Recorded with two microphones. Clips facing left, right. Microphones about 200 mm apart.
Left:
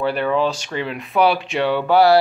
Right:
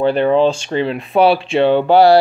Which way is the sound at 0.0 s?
25° right (ahead or behind).